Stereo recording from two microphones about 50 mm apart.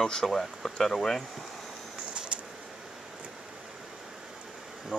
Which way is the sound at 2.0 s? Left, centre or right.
Right.